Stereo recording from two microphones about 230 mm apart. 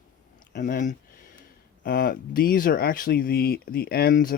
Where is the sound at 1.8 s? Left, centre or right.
Left.